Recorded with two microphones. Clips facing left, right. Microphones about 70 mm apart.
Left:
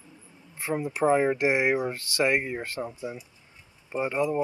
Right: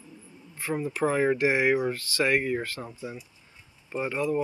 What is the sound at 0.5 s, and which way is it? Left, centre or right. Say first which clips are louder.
Speech: left 1 dB; left.